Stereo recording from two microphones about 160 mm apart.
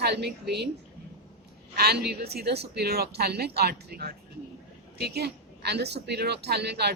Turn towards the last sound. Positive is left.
turn(degrees=-90)